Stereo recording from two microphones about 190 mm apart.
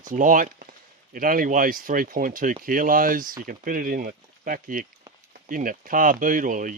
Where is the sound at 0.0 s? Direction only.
45° right (ahead or behind).